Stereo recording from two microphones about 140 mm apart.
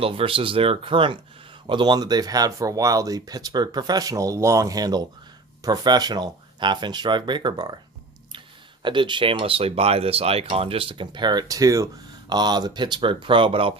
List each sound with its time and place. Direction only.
0.0 s speech: 40° right (ahead or behind)
8.8 s speech: 35° right (ahead or behind)